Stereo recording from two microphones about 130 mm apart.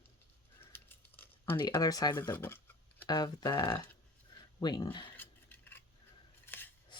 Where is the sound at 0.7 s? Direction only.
15° left (ahead or behind).